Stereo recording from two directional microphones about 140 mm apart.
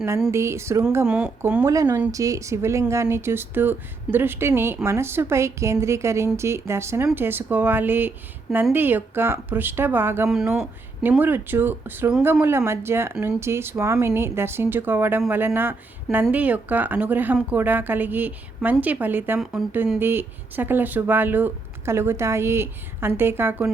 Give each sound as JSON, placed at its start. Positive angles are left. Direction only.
{"t": 0.3, "sound": "speech", "side_deg": -20}
{"t": 1.0, "sound": "speech", "side_deg": -5}
{"t": 1.6, "sound": "speech", "side_deg": -25}
{"t": 10.2, "sound": "speech", "side_deg": -5}